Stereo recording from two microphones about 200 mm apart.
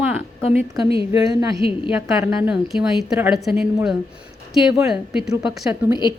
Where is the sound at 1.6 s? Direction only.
25° left (ahead or behind).